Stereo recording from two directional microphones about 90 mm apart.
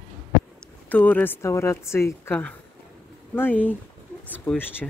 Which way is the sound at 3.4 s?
20° left (ahead or behind).